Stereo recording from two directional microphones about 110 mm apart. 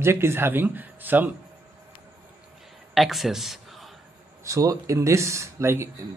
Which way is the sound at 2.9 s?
Centre (ahead or behind).